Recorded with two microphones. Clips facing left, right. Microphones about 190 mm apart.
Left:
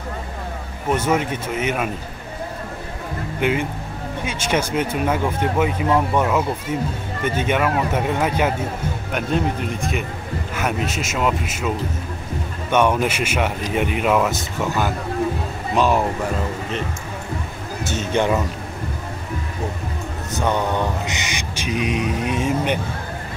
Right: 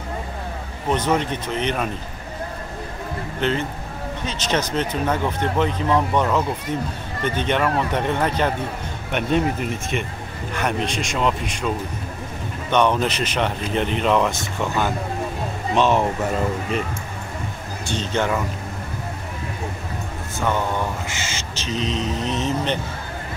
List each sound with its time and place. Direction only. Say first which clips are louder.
0.8 s speech: left 1 dB; 10° left (ahead or behind)
3.3 s speech: left 2 dB; 10° left (ahead or behind)
12.7 s speech: left 1 dB; 10° left (ahead or behind)
17.8 s speech: left 3 dB; 10° left (ahead or behind)
20.3 s speech: left 2 dB; 20° left (ahead or behind)